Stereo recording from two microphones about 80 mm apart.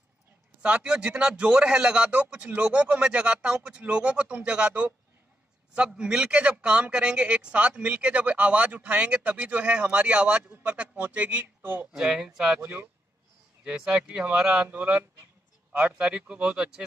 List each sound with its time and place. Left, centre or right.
0.6 s speech: centre
11.9 s speech: centre
12.6 s speech: right
13.7 s speech: centre